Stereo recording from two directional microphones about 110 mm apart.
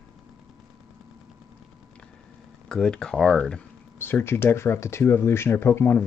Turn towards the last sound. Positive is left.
turn(degrees=20)  # may be behind; listen again after turning